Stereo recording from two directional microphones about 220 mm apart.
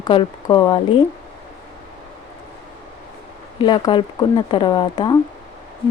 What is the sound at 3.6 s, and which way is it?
Speech, 20° left (ahead or behind).